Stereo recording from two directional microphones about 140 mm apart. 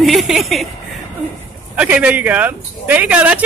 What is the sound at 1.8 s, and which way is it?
Speech, 10° right (ahead or behind).